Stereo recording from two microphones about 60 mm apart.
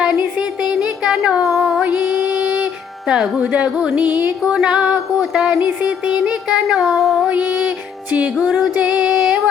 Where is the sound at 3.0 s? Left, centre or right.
Centre.